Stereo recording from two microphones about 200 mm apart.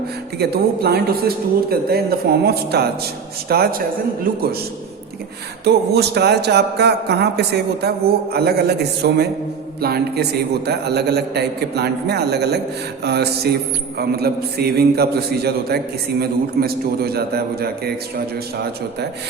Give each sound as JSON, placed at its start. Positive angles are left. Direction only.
{"t": 0.3, "sound": "speech", "side_deg": -55}
{"t": 5.6, "sound": "speech", "side_deg": -55}